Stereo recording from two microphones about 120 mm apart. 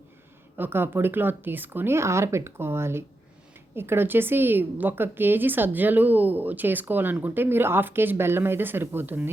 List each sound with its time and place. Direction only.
0.5 s a woman's voice: 15° right (ahead or behind)